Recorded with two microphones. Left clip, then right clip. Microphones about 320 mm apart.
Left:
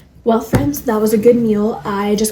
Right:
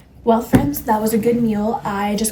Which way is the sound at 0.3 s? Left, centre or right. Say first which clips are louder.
Left 1 dB; right.